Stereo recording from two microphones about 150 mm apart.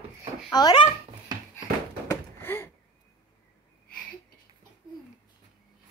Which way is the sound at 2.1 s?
15° left (ahead or behind).